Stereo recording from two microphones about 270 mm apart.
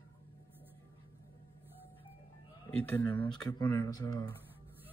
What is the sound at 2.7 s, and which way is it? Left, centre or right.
Speech, centre.